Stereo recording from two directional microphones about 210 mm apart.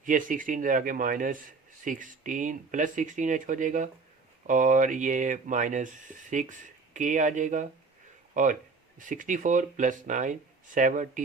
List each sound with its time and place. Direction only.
0.0 s a man's voice: 40° right (ahead or behind)